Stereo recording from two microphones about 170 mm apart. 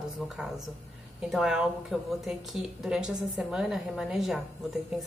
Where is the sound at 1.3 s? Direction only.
Centre (ahead or behind).